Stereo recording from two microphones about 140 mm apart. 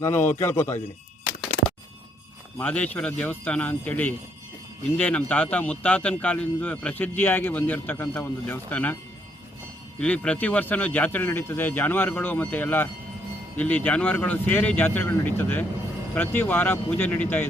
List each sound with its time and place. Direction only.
0.0 s a man's voice: 15° left (ahead or behind)
2.6 s a man's voice: 10° left (ahead or behind)
10.0 s a man's voice: 10° left (ahead or behind)